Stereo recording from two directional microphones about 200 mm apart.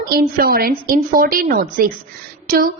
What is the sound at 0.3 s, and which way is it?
A woman's voice, 50° right (ahead or behind).